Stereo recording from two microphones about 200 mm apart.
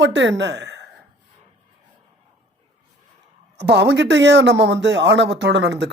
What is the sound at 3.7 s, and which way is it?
Speech, 60° right (ahead or behind).